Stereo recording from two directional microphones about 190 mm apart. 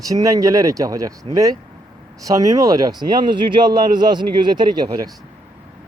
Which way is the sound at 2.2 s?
20° right (ahead or behind).